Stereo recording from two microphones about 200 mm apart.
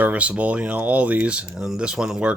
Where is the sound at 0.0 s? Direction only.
5° right (ahead or behind).